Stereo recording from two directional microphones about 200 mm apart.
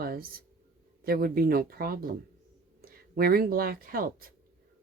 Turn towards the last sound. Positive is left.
turn(degrees=-45)  # may be behind; listen again after turning